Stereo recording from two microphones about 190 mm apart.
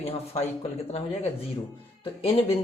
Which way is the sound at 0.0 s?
35° left (ahead or behind).